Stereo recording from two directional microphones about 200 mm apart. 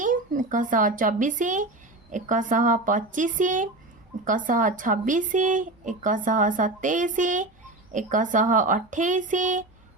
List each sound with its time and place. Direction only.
0.0 s speech: 40° right (ahead or behind)